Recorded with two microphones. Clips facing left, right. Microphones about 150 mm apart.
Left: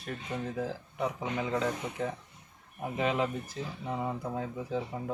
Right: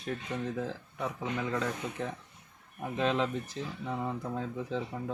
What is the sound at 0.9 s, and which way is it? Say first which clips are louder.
Speech: left 2 dB; 20° left (ahead or behind).